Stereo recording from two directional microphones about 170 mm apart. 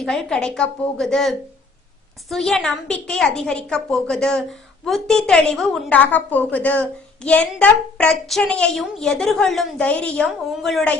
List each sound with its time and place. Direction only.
0.0 s a woman's voice: 5° left (ahead or behind)